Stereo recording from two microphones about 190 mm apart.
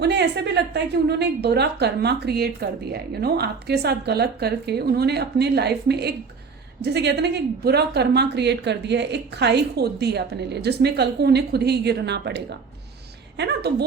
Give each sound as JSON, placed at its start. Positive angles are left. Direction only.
{"t": 0.0, "sound": "a woman's voice", "side_deg": -60}